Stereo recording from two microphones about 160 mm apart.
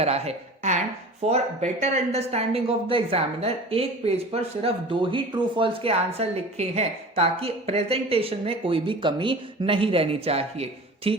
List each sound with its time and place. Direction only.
0.0 s speech: 40° right (ahead or behind)